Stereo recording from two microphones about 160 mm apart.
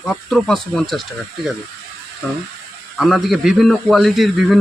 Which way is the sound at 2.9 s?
Centre (ahead or behind).